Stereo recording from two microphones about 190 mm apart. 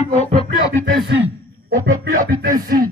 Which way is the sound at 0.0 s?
35° left (ahead or behind).